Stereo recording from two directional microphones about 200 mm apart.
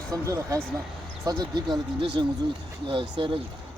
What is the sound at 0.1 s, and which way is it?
Speech, 15° right (ahead or behind).